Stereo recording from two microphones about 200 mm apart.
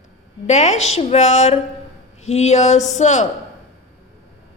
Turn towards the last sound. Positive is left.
turn(degrees=35)  # may be behind; listen again after turning